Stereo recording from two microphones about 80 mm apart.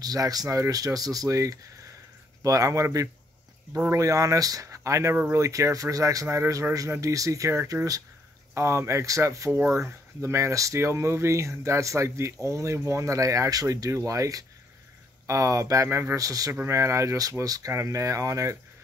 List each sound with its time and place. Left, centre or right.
0.0 s speech: right